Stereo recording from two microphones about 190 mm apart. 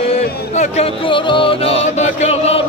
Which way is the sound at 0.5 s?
35° left (ahead or behind).